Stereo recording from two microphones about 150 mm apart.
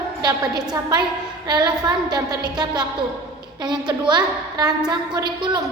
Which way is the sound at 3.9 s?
30° right (ahead or behind).